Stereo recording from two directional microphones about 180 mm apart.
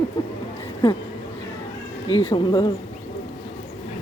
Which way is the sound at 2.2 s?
30° left (ahead or behind).